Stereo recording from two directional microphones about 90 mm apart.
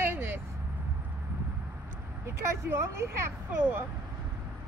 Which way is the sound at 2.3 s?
30° right (ahead or behind).